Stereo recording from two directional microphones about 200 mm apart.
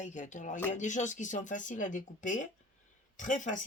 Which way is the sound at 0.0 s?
40° left (ahead or behind).